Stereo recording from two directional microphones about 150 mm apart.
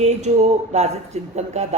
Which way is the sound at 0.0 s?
45° right (ahead or behind).